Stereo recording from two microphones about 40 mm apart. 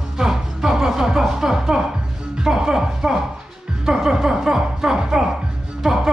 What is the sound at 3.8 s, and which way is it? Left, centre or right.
Speech, centre.